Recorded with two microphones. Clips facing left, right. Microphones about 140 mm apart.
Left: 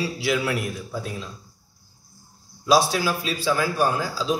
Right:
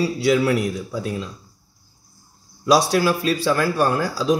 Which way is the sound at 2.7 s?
65° right (ahead or behind).